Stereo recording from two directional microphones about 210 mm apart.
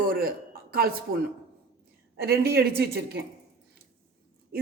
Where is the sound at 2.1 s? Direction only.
50° right (ahead or behind).